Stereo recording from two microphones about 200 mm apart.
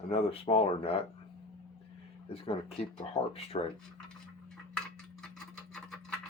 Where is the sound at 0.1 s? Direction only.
30° left (ahead or behind).